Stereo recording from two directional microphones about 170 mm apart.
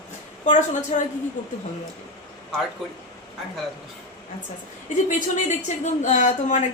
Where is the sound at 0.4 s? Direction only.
45° left (ahead or behind).